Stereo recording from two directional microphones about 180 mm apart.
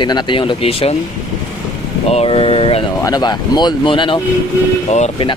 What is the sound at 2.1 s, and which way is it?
Speech, 35° left (ahead or behind).